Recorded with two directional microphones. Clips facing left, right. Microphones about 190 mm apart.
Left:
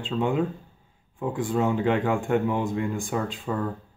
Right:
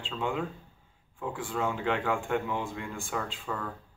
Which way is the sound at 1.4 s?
20° left (ahead or behind).